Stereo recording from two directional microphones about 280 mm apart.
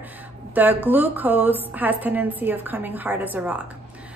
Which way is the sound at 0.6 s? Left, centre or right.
Centre.